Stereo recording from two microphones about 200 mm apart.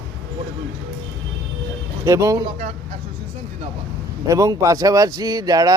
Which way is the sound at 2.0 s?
15° right (ahead or behind).